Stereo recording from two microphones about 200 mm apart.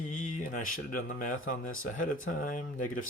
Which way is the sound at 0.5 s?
40° left (ahead or behind).